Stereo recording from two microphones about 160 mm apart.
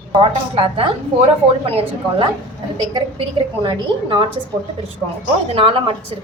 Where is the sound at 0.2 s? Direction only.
35° right (ahead or behind).